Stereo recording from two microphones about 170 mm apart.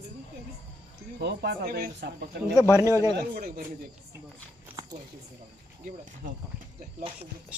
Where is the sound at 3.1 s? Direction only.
60° right (ahead or behind).